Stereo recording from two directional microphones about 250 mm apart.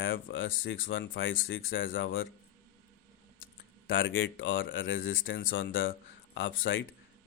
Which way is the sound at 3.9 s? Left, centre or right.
Left.